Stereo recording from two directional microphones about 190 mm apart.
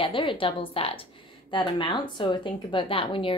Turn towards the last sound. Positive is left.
turn(degrees=25)  # may be behind; listen again after turning